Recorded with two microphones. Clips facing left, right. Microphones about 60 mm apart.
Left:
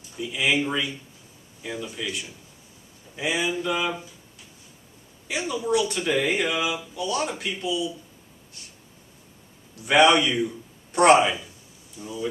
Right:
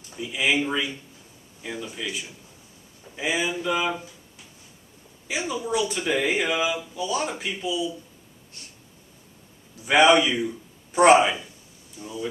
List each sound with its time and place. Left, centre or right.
0.2 s speech: centre
5.3 s speech: centre
9.8 s a man's voice: centre